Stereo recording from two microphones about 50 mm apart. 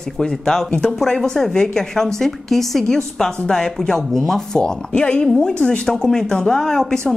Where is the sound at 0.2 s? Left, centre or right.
Centre.